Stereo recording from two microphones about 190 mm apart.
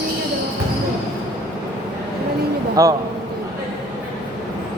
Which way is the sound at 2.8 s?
20° right (ahead or behind).